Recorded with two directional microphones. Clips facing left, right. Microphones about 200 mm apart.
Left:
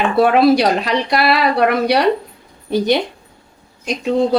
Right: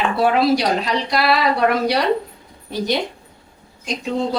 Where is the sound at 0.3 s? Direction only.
60° left (ahead or behind).